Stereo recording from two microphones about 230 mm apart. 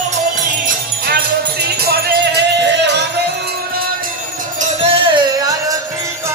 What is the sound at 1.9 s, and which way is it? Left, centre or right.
Music, right.